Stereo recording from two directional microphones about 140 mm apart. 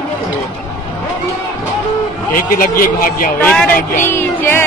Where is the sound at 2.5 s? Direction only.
85° left.